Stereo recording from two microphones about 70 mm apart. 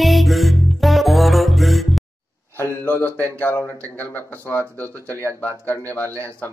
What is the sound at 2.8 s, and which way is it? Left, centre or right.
Speech, left.